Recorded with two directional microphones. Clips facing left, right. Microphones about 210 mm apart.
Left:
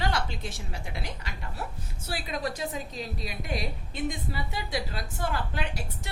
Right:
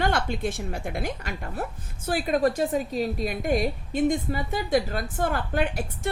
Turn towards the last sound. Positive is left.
turn(degrees=-50)  # may be behind; listen again after turning